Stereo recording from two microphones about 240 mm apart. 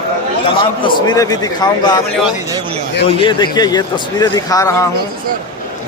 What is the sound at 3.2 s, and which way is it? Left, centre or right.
A man's voice, centre.